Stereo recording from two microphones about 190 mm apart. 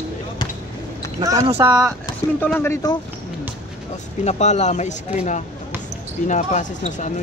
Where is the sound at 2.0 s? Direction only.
10° left (ahead or behind).